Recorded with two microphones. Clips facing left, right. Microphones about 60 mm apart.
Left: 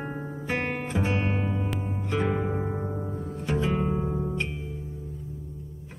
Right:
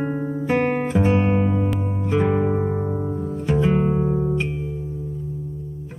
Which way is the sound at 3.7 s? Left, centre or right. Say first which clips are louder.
Right 7 dB; right.